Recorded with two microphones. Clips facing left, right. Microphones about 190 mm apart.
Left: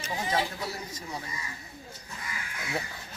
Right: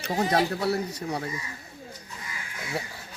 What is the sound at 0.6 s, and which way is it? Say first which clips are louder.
Speech: right 10 dB; 65° right (ahead or behind).